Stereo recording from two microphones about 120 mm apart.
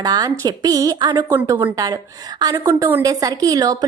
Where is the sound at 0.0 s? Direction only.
35° right (ahead or behind).